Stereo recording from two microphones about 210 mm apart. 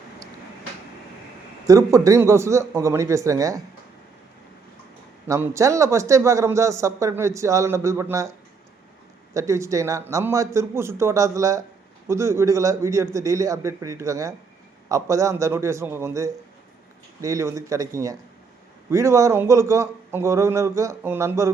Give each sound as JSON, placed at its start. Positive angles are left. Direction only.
{"t": 1.6, "sound": "speech", "side_deg": -15}
{"t": 5.3, "sound": "speech", "side_deg": -15}
{"t": 9.3, "sound": "speech", "side_deg": -15}